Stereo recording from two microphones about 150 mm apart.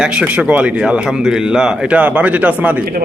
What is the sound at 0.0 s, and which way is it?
Speech, 10° right (ahead or behind).